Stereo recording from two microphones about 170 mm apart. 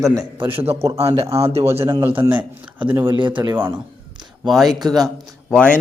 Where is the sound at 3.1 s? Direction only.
30° right (ahead or behind).